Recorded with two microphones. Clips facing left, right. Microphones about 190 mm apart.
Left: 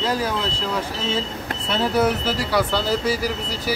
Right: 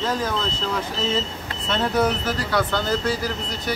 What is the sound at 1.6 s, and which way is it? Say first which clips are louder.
Speech: left 1 dB; 5° left (ahead or behind).